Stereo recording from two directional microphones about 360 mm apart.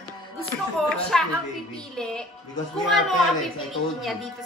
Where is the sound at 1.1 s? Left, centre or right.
Centre.